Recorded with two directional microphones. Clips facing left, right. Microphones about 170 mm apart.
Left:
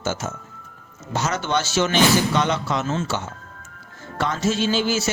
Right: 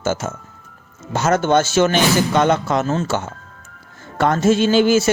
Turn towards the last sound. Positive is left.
turn(degrees=-55)  # may be behind; listen again after turning